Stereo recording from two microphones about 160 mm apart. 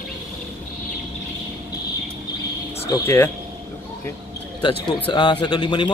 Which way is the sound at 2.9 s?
15° left (ahead or behind).